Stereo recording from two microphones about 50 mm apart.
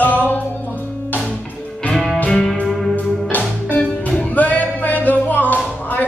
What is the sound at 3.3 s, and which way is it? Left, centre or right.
Music, left.